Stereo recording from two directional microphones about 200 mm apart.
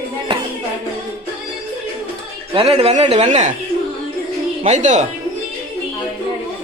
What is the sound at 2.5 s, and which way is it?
Speech, 30° right (ahead or behind).